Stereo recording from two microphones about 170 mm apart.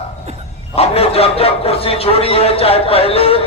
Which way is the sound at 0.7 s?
35° left (ahead or behind).